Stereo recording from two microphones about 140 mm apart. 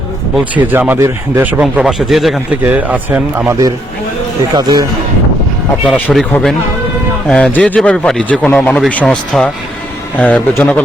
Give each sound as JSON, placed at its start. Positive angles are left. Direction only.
{"t": 0.3, "sound": "a man's voice", "side_deg": -10}
{"t": 4.5, "sound": "speech", "side_deg": -30}
{"t": 5.8, "sound": "speech", "side_deg": 0}
{"t": 7.3, "sound": "speech", "side_deg": 10}